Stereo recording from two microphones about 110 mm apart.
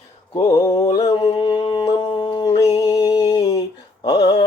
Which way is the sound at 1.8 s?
50° left (ahead or behind).